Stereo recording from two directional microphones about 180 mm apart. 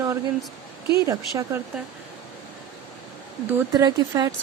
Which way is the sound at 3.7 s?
20° right (ahead or behind).